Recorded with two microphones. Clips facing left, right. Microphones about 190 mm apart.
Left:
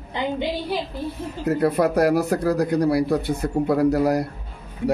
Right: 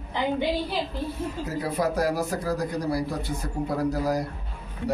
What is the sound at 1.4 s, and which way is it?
Speech, 60° left (ahead or behind).